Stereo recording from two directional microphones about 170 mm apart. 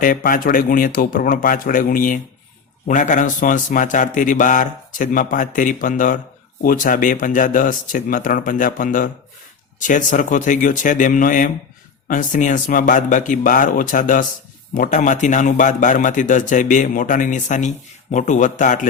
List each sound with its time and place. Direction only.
0.0 s a man's voice: 55° left (ahead or behind)